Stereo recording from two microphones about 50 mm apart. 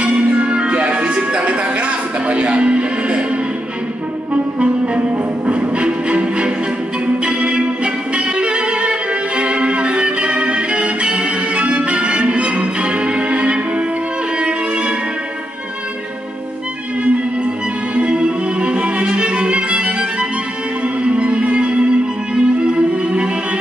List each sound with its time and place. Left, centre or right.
0.0 s music: right
4.3 s clarinet: right
5.5 s music: right
14.4 s violin: centre
17.9 s violin: right
21.0 s music: right